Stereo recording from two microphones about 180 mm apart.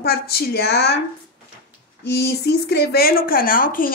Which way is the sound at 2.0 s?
65° left (ahead or behind).